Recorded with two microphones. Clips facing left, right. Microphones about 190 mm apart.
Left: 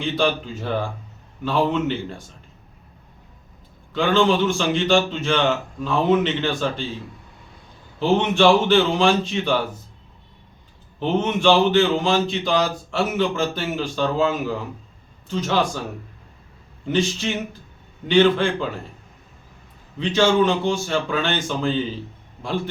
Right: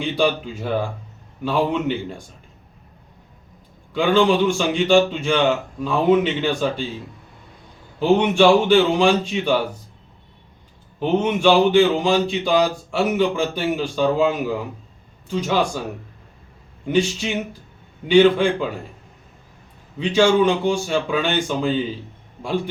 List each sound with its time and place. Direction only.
0.0 s a man's voice: 10° right (ahead or behind)
3.9 s a man's voice: 10° right (ahead or behind)
7.9 s a man's voice: 10° right (ahead or behind)
11.0 s a man's voice: 10° right (ahead or behind)
16.8 s a man's voice: 10° right (ahead or behind)
20.0 s a man's voice: 10° right (ahead or behind)